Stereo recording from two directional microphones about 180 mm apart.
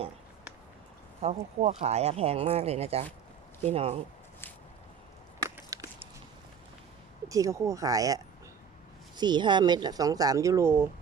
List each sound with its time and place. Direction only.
1.2 s speech: 35° right (ahead or behind)
5.5 s a sound: 15° right (ahead or behind)
7.3 s speech: 20° right (ahead or behind)